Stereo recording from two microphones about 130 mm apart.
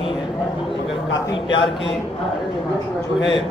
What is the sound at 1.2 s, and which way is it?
Speech, 40° left (ahead or behind).